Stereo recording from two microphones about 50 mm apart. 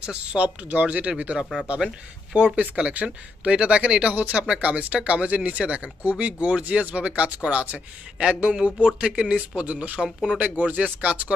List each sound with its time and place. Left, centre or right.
0.0 s speech: right